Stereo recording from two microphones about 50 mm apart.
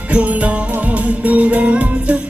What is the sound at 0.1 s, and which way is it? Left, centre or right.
Music, right.